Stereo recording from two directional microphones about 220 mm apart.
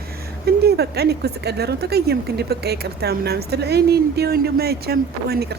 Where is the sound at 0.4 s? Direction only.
45° right (ahead or behind).